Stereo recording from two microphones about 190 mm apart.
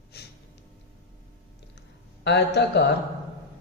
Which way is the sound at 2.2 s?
65° left (ahead or behind).